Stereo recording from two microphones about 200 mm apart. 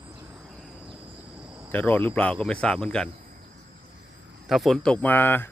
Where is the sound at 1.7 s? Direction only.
10° left (ahead or behind).